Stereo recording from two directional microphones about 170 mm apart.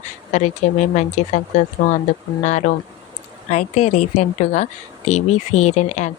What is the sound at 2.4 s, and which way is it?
Speech, 45° left (ahead or behind).